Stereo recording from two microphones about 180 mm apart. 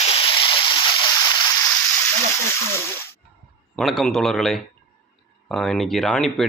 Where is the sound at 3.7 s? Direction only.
Centre (ahead or behind).